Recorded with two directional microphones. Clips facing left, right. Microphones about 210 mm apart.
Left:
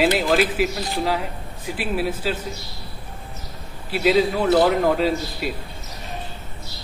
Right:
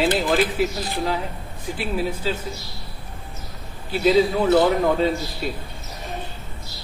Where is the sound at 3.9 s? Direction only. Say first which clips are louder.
Right 1 dB; centre (ahead or behind).